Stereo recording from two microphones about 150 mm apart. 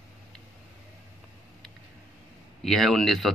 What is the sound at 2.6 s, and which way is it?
Speech, centre (ahead or behind).